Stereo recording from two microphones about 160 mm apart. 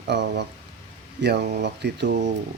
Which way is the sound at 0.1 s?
90° right.